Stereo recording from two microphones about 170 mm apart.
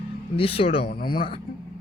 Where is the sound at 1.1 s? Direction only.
30° left (ahead or behind).